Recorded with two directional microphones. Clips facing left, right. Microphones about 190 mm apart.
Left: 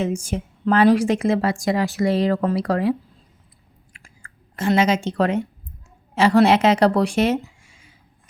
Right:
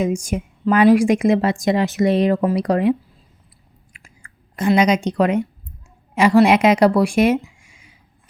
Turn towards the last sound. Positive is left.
turn(degrees=-10)  # may be behind; listen again after turning